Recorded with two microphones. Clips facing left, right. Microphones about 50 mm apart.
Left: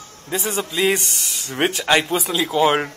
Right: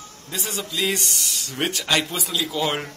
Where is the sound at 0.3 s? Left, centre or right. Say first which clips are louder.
Left 6 dB; left.